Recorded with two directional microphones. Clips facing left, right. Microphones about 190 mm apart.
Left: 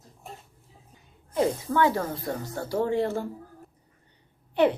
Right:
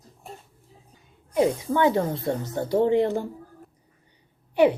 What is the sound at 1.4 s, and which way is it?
A woman's voice, 20° right (ahead or behind).